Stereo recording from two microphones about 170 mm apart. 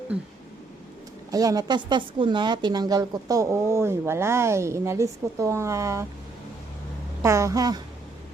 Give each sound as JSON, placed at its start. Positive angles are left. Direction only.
{"t": 1.3, "sound": "a woman's voice", "side_deg": -20}
{"t": 7.2, "sound": "a woman's voice", "side_deg": -20}